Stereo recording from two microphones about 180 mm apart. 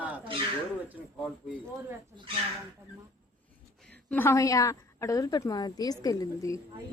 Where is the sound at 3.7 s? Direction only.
5° left (ahead or behind).